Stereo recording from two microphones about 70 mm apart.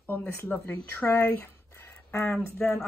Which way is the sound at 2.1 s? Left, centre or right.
Left.